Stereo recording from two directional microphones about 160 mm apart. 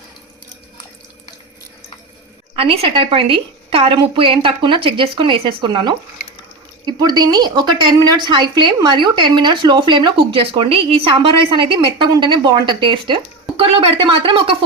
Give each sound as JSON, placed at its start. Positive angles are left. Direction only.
{"t": 2.6, "sound": "a woman's voice", "side_deg": -35}